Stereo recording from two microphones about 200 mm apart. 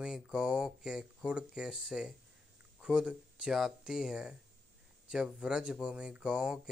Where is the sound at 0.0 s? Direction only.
5° right (ahead or behind).